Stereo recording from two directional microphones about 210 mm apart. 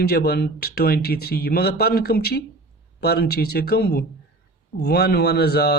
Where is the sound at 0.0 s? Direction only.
50° left (ahead or behind).